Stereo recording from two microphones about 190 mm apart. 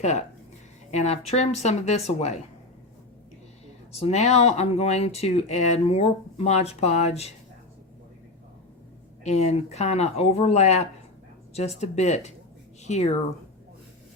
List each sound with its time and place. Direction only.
0.0 s speech: 35° left (ahead or behind)
4.0 s speech: 35° left (ahead or behind)
9.2 s speech: 35° left (ahead or behind)